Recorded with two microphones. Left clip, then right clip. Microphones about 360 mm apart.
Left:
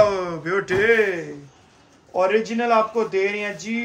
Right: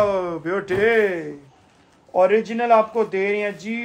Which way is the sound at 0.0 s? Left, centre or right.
Centre.